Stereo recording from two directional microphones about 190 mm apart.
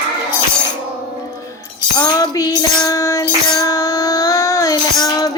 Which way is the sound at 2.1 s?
20° left (ahead or behind).